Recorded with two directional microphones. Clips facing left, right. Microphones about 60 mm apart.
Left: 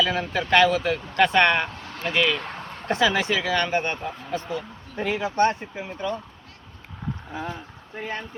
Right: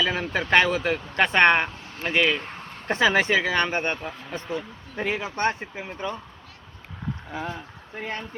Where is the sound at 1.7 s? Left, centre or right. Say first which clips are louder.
Left 4 dB; left.